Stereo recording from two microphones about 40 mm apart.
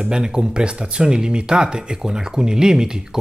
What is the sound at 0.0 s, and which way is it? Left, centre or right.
Speech, right.